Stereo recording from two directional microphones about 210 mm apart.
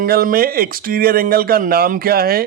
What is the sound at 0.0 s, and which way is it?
Speech, 45° right (ahead or behind).